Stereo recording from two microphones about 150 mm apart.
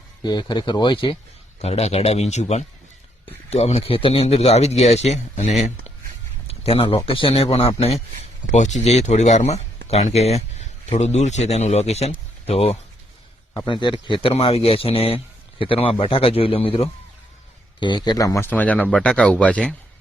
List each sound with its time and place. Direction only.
0.2 s speech: 30° left (ahead or behind)
1.6 s speech: 45° left (ahead or behind)
8.5 s speech: 50° left (ahead or behind); by 19.7 s 10° left (ahead or behind)